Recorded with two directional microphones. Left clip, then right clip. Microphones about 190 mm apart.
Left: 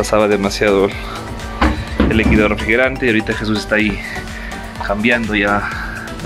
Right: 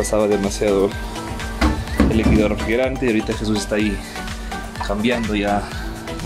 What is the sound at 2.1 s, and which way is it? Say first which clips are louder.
Speech: left 6 dB; 10° right (ahead or behind).